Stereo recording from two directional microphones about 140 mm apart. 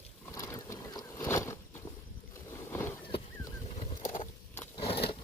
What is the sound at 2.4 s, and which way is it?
Boat, 20° left (ahead or behind).